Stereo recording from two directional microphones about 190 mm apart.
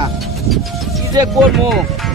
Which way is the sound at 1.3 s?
Centre (ahead or behind).